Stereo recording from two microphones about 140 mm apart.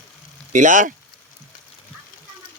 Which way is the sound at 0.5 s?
65° right (ahead or behind).